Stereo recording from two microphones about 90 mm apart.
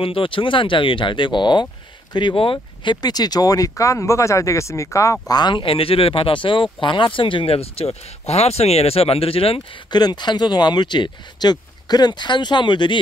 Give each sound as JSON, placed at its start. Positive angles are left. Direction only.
{"t": 0.0, "sound": "speech", "side_deg": 75}
{"t": 2.1, "sound": "speech", "side_deg": 75}
{"t": 5.3, "sound": "speech", "side_deg": 55}
{"t": 9.8, "sound": "speech", "side_deg": 50}